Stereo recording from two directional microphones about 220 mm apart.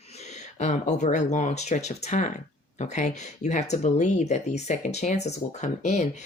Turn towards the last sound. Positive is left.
turn(degrees=30)  # may be behind; listen again after turning